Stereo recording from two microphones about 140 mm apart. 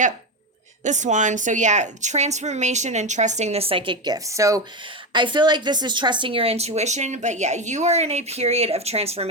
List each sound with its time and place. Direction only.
0.9 s a woman's voice: 60° right (ahead or behind); by 4.6 s 25° right (ahead or behind)
5.1 s a woman's voice: 35° right (ahead or behind)